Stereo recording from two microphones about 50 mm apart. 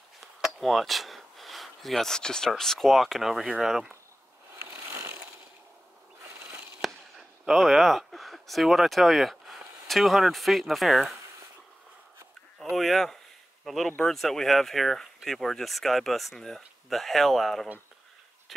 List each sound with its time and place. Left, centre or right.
0.2 s speech: centre
4.6 s a sound: right
6.8 s speech: centre
12.7 s speech: centre